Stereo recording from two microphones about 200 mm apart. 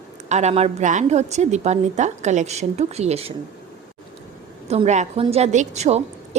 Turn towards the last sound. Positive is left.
turn(degrees=-35)  # may be behind; listen again after turning